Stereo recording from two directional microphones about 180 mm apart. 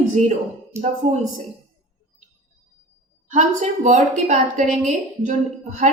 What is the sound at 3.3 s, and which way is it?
A woman's voice, 45° right (ahead or behind).